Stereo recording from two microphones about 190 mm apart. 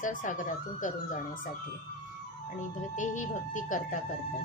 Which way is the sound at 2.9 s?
40° left (ahead or behind).